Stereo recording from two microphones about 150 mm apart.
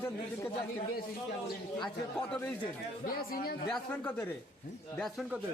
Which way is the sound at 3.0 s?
85° left.